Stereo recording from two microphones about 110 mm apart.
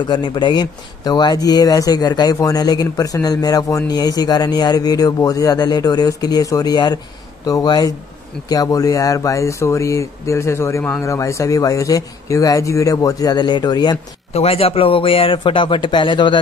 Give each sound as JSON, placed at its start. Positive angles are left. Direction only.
{"t": 0.1, "sound": "speech", "side_deg": 40}
{"t": 14.3, "sound": "a man's voice", "side_deg": 65}